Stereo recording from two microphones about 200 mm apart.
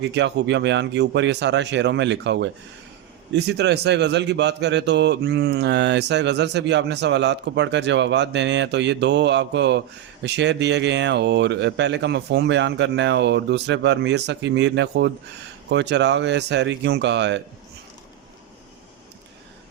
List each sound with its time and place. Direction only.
0.0 s a man's voice: 60° right (ahead or behind)